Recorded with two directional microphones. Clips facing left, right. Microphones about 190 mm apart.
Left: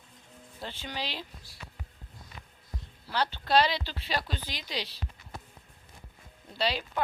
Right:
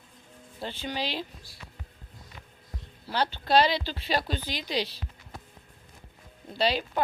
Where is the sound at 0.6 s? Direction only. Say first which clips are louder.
Right 5 dB; 20° right (ahead or behind).